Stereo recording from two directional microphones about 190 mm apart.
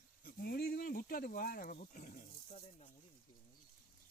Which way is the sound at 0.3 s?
55° left (ahead or behind).